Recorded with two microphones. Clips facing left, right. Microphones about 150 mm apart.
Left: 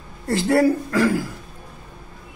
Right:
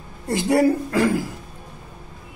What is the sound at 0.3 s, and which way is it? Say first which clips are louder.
Speech: left 1 dB; 20° right (ahead or behind).